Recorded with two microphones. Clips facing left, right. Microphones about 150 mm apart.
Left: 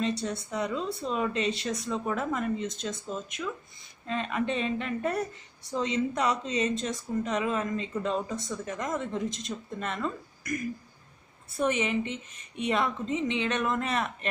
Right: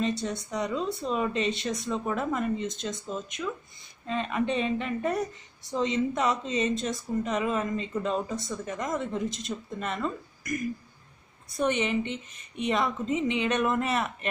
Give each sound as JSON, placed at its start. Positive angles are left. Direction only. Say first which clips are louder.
{"t": 0.0, "sound": "speech", "louder": "right 1 dB", "side_deg": 0}